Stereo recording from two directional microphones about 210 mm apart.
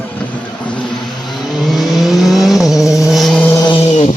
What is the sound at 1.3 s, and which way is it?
Vehicle, centre (ahead or behind).